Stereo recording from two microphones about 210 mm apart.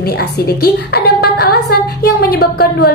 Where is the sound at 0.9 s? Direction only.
50° left (ahead or behind).